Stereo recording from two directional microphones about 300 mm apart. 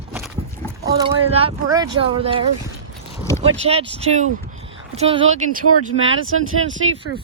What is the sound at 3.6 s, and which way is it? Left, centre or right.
Speech, centre.